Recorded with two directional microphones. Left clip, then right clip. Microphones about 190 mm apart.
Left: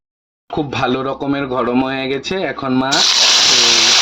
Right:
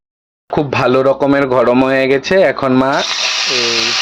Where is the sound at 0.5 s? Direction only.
40° right (ahead or behind).